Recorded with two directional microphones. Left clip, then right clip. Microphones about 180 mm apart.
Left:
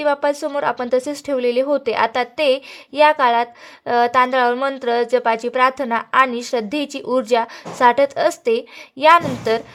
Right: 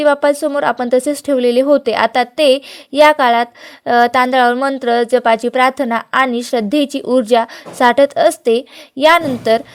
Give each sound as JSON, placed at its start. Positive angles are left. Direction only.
{"t": 0.0, "sound": "a woman's voice", "side_deg": -25}